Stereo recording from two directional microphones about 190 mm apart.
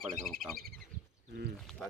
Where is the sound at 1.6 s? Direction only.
5° left (ahead or behind).